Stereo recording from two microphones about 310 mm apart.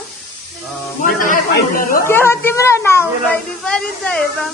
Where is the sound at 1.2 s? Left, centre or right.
Left.